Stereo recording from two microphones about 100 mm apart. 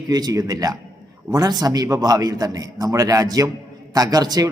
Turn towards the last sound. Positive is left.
turn(degrees=-40)  # may be behind; listen again after turning